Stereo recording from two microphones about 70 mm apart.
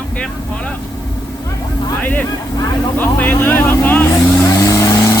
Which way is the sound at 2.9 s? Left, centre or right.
Left.